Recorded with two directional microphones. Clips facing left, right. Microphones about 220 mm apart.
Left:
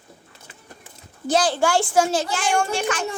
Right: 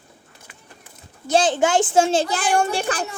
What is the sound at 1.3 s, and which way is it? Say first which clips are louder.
A child's voice: right 2 dB; 25° right (ahead or behind).